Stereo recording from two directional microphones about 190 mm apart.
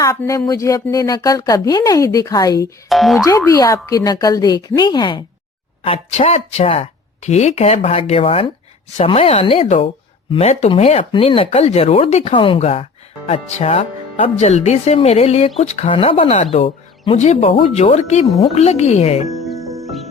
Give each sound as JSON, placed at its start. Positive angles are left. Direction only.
{"t": 0.0, "sound": "speech", "side_deg": 15}
{"t": 2.9, "sound": "speech", "side_deg": 0}
{"t": 3.2, "sound": "speech", "side_deg": 15}
{"t": 19.3, "sound": "music", "side_deg": 0}